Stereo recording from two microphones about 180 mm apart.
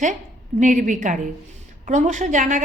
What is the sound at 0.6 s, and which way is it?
A woman's voice, 45° right (ahead or behind).